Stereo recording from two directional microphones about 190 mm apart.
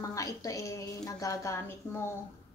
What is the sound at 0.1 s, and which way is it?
A woman's voice, 15° left (ahead or behind).